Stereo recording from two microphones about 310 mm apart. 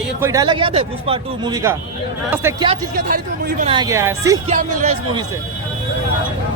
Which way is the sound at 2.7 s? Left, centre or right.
Right.